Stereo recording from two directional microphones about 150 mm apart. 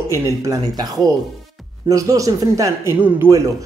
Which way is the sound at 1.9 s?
20° right (ahead or behind).